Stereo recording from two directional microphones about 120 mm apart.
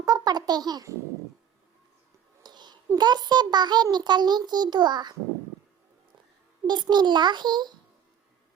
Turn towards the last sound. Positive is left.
turn(degrees=-35)  # may be behind; listen again after turning